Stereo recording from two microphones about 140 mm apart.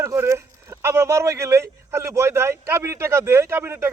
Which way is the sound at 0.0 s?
20° right (ahead or behind).